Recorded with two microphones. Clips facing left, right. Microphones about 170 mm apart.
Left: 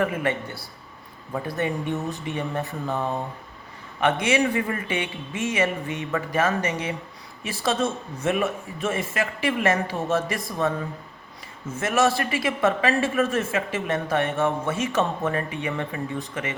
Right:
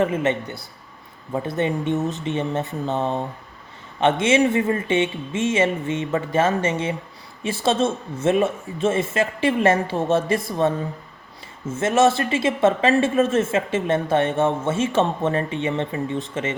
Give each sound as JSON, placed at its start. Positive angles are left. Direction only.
{"t": 0.0, "sound": "speech", "side_deg": -25}